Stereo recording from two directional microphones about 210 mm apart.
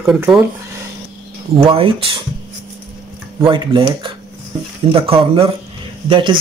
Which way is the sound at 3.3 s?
25° right (ahead or behind).